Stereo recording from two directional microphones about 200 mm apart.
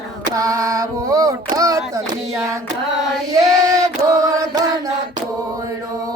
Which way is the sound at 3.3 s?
15° right (ahead or behind).